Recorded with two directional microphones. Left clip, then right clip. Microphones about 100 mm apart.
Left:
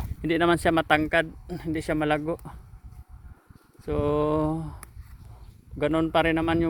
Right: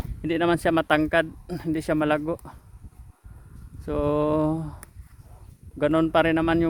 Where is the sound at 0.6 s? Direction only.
30° right (ahead or behind).